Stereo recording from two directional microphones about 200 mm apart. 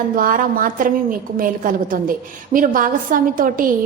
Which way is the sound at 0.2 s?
45° right (ahead or behind).